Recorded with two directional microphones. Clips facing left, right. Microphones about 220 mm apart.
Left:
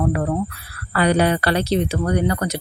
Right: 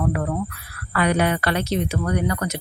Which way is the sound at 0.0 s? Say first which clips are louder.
Left 3 dB; 35° left (ahead or behind).